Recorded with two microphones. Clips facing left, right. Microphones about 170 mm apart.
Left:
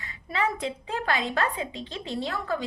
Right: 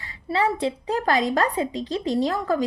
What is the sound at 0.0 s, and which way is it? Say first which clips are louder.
A woman's voice: right 5 dB; 30° right (ahead or behind).